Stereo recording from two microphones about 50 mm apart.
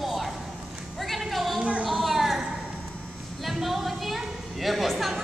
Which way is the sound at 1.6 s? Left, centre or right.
Right.